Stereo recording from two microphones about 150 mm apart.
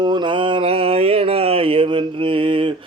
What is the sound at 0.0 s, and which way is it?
Mantra, 30° right (ahead or behind).